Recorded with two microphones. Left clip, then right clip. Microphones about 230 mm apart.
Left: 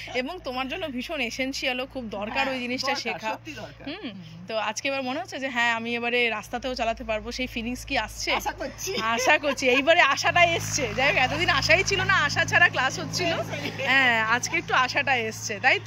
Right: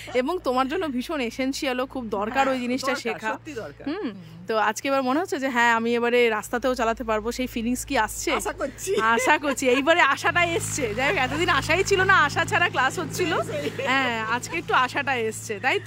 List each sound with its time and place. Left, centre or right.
0.1 s speech: right
4.5 s speech: centre